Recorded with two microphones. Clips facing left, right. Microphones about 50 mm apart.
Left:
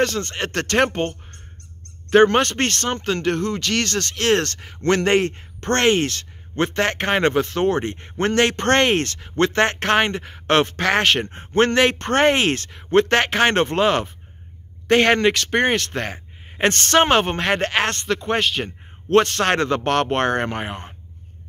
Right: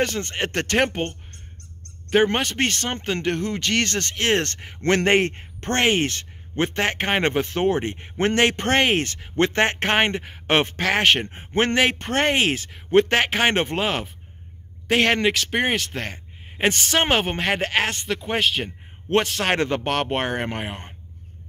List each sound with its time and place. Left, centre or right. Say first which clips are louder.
0.0 s speech: left 2 dB; centre
2.2 s speech: left 4 dB; centre; by 5.7 s right
5.7 s speech: left 3 dB; centre